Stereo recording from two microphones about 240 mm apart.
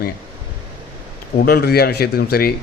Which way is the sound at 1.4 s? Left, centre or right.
Left.